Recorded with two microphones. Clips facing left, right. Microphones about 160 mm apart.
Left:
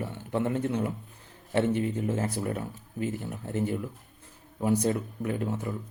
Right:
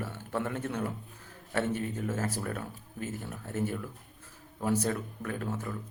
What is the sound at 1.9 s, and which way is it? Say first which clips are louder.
A man's voice: left 4 dB; 20° left (ahead or behind).